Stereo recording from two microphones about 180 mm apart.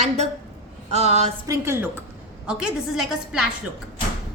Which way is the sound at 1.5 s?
15° right (ahead or behind).